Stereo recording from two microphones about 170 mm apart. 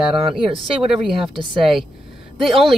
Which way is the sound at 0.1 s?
30° right (ahead or behind).